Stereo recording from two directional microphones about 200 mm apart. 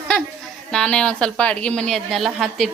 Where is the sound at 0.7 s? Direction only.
5° left (ahead or behind).